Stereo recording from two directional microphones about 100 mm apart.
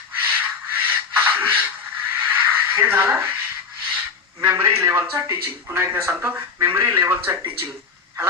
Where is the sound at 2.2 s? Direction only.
20° right (ahead or behind).